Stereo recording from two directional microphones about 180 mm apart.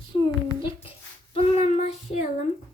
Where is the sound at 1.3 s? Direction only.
35° left (ahead or behind).